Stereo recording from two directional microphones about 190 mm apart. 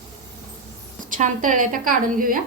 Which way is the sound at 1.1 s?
40° right (ahead or behind).